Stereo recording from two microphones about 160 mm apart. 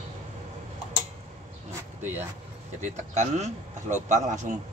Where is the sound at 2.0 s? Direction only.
10° right (ahead or behind).